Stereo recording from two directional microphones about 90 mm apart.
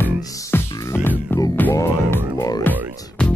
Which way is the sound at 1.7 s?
35° left (ahead or behind).